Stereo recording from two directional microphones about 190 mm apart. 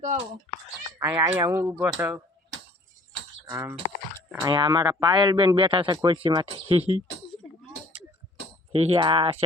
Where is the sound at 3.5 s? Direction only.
15° right (ahead or behind).